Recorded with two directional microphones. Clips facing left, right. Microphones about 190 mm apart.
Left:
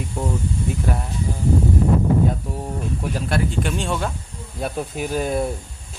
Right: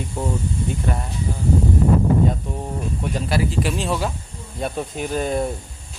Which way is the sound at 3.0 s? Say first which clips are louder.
Right 1 dB; centre (ahead or behind).